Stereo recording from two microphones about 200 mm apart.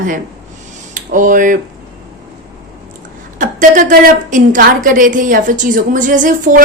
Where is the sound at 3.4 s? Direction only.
40° right (ahead or behind).